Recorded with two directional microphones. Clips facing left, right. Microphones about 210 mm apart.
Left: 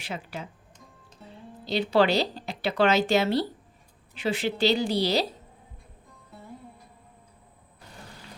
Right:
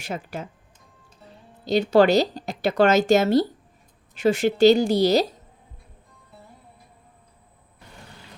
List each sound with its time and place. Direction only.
0.0 s speech: 45° right (ahead or behind)
1.6 s speech: 45° right (ahead or behind)